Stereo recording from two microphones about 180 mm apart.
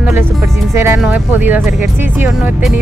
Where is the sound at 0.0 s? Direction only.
15° right (ahead or behind).